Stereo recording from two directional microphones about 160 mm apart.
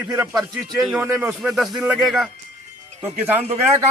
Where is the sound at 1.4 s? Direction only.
Centre (ahead or behind).